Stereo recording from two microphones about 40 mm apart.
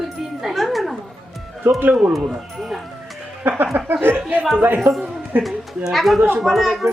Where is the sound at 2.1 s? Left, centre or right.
Centre.